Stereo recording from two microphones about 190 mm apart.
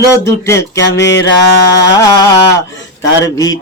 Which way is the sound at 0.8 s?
65° left (ahead or behind).